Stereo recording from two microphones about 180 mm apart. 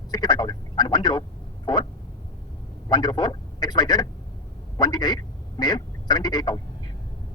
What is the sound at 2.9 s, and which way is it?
Speech, 25° left (ahead or behind).